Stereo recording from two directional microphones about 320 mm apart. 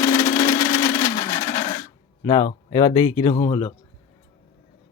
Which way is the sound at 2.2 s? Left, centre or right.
Centre.